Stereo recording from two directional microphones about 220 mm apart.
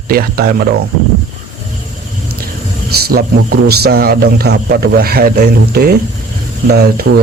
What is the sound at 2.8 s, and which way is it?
Speech, 45° right (ahead or behind).